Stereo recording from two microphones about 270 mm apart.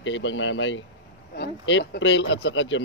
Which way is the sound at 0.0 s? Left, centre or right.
Left.